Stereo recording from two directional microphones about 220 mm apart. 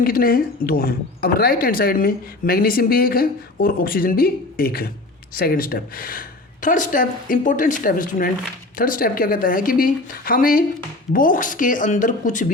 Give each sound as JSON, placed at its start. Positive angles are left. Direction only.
{"t": 0.0, "sound": "a woman's voice", "side_deg": 40}